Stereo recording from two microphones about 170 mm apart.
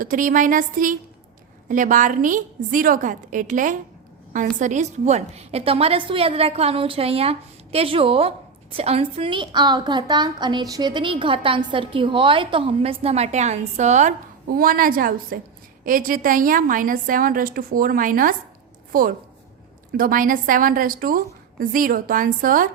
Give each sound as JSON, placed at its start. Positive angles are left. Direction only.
{"t": 0.0, "sound": "a woman's voice", "side_deg": -55}
{"t": 14.4, "sound": "a woman's voice", "side_deg": -60}